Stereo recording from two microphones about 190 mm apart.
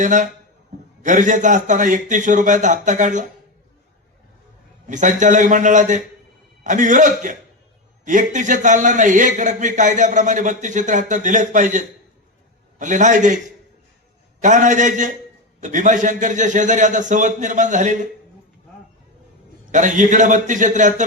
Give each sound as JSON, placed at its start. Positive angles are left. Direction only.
{"t": 0.0, "sound": "a man's voice", "side_deg": -40}
{"t": 4.9, "sound": "a man's voice", "side_deg": -40}
{"t": 14.4, "sound": "a man's voice", "side_deg": -40}
{"t": 19.7, "sound": "a man's voice", "side_deg": -40}